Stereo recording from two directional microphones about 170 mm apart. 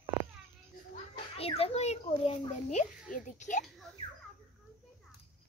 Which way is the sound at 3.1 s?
45° left (ahead or behind).